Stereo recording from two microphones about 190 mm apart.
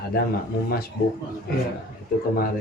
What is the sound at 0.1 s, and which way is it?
Speech, 55° left (ahead or behind).